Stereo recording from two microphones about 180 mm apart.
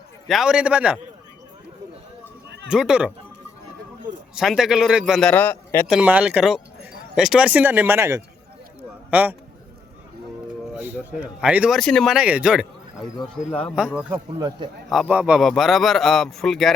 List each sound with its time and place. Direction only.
0.3 s speech: 5° right (ahead or behind)
2.6 s speech: 5° right (ahead or behind)
4.4 s speech: centre (ahead or behind)
5.3 s a man's voice: 10° left (ahead or behind)
5.9 s a man's voice: 10° right (ahead or behind)
10.8 s speech: 10° right (ahead or behind)
13.7 s speech: 5° right (ahead or behind)
14.3 s a man's voice: 25° right (ahead or behind)
14.8 s speech: 5° right (ahead or behind)